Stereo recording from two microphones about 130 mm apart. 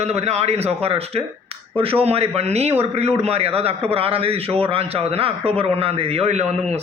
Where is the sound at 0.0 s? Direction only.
55° right (ahead or behind).